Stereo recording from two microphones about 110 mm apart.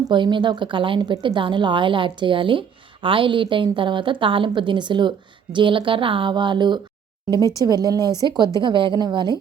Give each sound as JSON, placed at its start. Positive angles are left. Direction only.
{"t": 0.1, "sound": "a woman's voice", "side_deg": -45}
{"t": 7.3, "sound": "speech", "side_deg": 30}
{"t": 7.6, "sound": "a woman's voice", "side_deg": -35}